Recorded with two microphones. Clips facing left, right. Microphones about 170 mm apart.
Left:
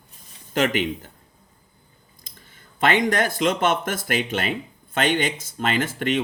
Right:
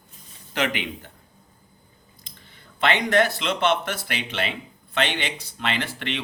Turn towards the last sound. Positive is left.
turn(degrees=45)  # may be behind; listen again after turning